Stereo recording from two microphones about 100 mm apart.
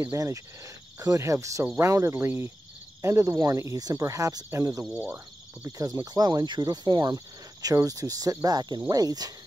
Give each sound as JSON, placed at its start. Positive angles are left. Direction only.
{"t": 0.0, "sound": "speech", "side_deg": -30}
{"t": 4.9, "sound": "speech", "side_deg": -15}
{"t": 5.7, "sound": "speech", "side_deg": -35}